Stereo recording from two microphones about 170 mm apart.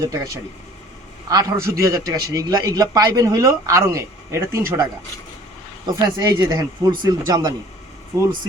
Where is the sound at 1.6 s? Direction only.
20° right (ahead or behind).